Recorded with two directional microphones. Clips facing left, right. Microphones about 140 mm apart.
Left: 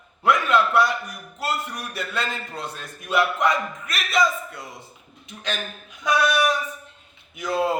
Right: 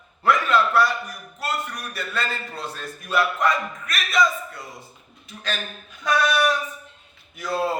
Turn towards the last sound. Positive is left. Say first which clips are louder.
# left 2 dB
turn(degrees=20)  # may be behind; listen again after turning